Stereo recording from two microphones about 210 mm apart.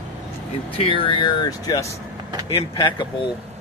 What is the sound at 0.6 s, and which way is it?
Speech, 25° left (ahead or behind).